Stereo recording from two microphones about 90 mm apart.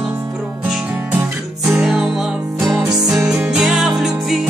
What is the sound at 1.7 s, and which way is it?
Music, 5° right (ahead or behind).